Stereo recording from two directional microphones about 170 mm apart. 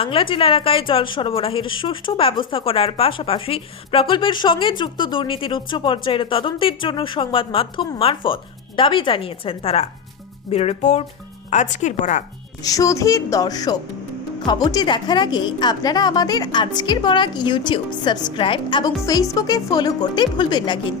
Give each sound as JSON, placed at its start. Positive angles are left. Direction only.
{"t": 0.0, "sound": "a woman's voice", "side_deg": 30}
{"t": 12.6, "sound": "a woman's voice", "side_deg": 20}